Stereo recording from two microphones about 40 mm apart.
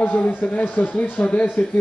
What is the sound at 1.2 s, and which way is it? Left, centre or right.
Speech, left.